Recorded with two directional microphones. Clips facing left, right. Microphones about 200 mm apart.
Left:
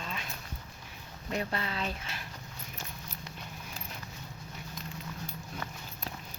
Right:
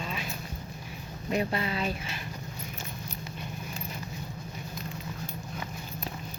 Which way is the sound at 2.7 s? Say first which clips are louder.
Right 5 dB; centre (ahead or behind).